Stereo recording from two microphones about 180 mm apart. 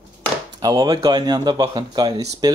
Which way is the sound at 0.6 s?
20° right (ahead or behind).